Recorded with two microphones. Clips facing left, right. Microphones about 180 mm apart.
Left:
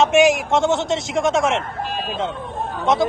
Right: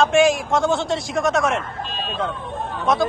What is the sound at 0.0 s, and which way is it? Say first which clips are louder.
Speech: left 1 dB; 25° left (ahead or behind).